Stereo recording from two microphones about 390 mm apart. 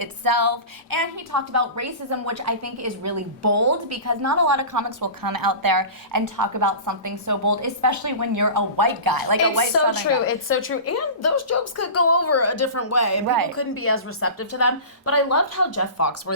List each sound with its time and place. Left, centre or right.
0.0 s a woman's voice: right
9.7 s a woman's voice: left
13.2 s a woman's voice: right
13.6 s a woman's voice: left